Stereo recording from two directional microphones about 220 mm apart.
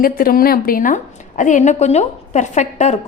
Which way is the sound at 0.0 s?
40° left (ahead or behind).